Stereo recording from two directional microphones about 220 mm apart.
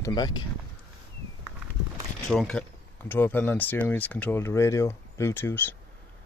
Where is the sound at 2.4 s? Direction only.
5° left (ahead or behind).